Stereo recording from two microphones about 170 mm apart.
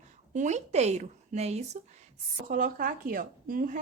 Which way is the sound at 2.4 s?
50° right (ahead or behind).